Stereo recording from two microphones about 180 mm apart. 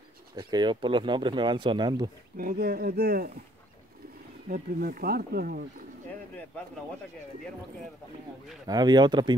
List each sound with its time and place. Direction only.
0.4 s speech: 25° right (ahead or behind)
2.3 s speech: 55° right (ahead or behind)
4.5 s speech: 55° right (ahead or behind)
8.6 s speech: 25° right (ahead or behind)